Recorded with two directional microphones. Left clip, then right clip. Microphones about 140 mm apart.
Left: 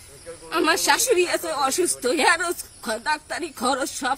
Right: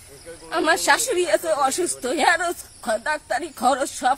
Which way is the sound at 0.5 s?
20° right (ahead or behind).